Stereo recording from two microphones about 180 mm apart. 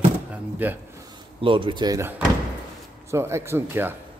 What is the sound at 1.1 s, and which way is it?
Speech, 30° right (ahead or behind).